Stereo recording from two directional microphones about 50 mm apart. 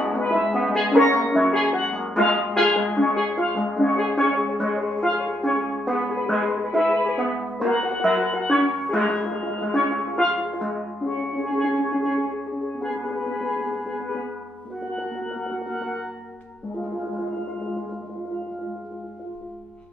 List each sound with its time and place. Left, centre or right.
0.3 s music: centre
5.9 s music: centre
6.8 s music: centre
7.2 s music: centre
9.8 s music: centre